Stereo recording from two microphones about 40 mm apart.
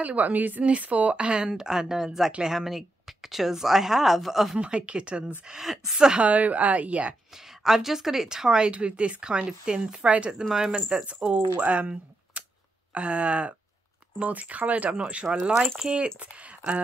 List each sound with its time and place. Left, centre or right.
0.0 s a woman's voice: right; by 4.6 s centre
4.6 s a woman's voice: right
5.5 s speech: centre
5.9 s a woman's voice: centre
6.2 s a woman's voice: right
7.6 s speech: centre
8.7 s a woman's voice: right
10.0 s a woman's voice: right
10.5 s a woman's voice: centre
11.6 s a woman's voice: right
12.4 s camera: right
12.9 s a woman's voice: right
16.2 s speech: right